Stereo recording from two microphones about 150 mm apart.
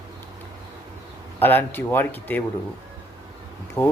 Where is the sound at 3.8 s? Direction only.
15° left (ahead or behind).